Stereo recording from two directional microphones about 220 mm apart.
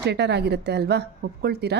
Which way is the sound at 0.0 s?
50° right (ahead or behind).